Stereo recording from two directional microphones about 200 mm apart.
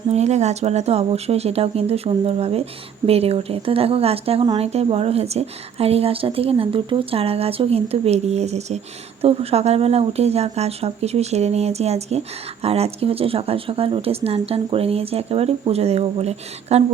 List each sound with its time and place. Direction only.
0.1 s speech: 35° right (ahead or behind)